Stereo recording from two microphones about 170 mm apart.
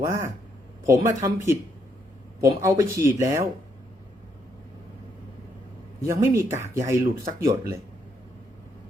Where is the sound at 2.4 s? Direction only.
20° right (ahead or behind).